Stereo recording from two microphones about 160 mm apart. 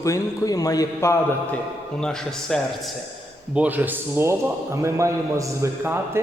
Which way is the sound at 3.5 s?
10° right (ahead or behind).